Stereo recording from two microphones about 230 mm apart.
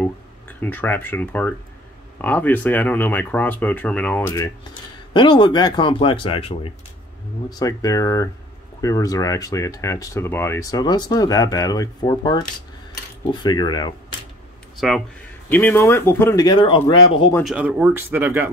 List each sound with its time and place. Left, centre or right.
0.0 s speech: centre
14.8 s speech: centre; by 16.9 s left
17.3 s speech: centre